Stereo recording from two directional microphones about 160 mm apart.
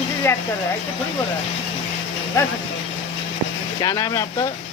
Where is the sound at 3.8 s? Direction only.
20° left (ahead or behind).